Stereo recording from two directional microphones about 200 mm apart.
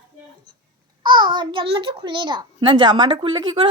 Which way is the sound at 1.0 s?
25° right (ahead or behind).